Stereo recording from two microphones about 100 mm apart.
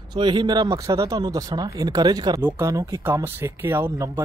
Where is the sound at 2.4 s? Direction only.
30° right (ahead or behind).